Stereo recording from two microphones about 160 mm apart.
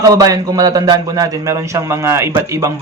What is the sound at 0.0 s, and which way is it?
A man's voice, 20° right (ahead or behind).